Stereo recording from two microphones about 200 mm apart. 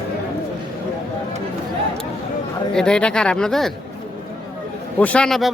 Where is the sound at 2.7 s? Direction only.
5° left (ahead or behind).